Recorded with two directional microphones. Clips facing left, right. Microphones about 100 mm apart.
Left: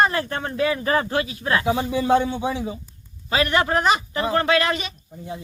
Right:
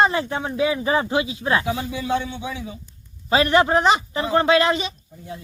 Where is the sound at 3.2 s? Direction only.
30° right (ahead or behind).